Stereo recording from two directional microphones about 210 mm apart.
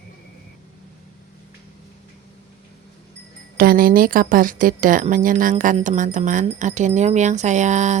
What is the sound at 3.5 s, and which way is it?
Speech, 45° right (ahead or behind).